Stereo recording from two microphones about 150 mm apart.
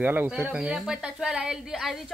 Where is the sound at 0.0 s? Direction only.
15° right (ahead or behind).